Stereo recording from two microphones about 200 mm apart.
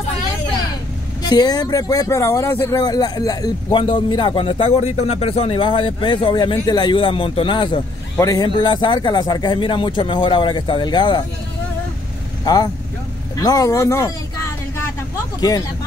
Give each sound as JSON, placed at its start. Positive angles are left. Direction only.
{"t": 1.3, "sound": "speech", "side_deg": 20}
{"t": 12.4, "sound": "speech", "side_deg": 20}